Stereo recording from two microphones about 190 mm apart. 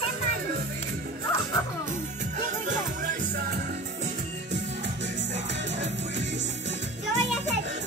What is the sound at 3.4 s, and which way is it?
Music, 55° right (ahead or behind).